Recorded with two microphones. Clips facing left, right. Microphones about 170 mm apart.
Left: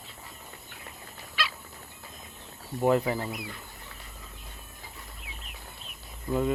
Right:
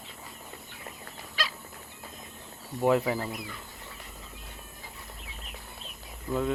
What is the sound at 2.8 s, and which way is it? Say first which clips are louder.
Speech: even; centre (ahead or behind).